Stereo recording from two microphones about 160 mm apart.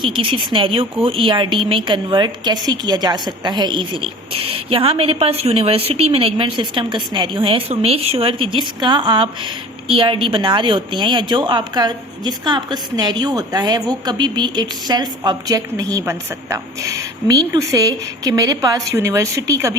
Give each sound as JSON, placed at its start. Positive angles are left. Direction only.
{"t": 0.0, "sound": "a woman's voice", "side_deg": -30}